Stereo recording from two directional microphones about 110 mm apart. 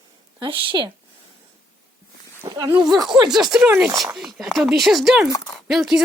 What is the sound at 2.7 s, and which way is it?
Speech, 40° right (ahead or behind).